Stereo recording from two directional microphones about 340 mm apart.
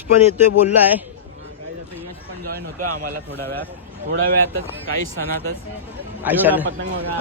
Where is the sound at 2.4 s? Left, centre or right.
Right.